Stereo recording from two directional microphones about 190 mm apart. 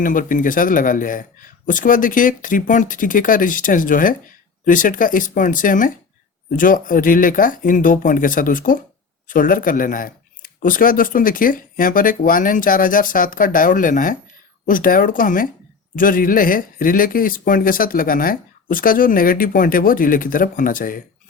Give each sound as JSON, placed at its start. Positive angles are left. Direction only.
{"t": 0.0, "sound": "speech", "side_deg": 45}